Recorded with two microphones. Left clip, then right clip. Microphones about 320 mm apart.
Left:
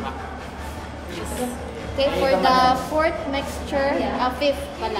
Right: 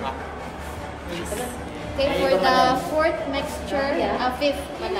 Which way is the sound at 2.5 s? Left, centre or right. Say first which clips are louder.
Left 1 dB; left.